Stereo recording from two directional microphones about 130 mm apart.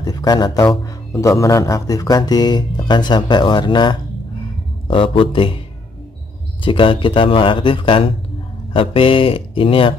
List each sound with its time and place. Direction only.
0.0 s speech: 30° left (ahead or behind)
6.6 s speech: 40° left (ahead or behind)